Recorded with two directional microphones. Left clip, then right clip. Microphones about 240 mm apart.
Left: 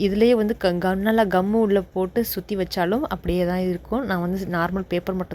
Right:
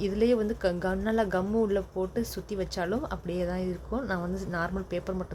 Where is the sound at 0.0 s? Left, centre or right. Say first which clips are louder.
Left 8 dB; left.